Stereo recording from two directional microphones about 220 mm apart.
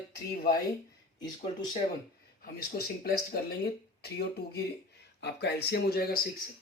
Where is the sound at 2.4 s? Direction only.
45° left (ahead or behind).